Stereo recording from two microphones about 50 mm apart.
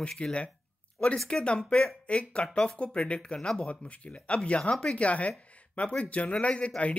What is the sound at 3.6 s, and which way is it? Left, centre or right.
Speech, left.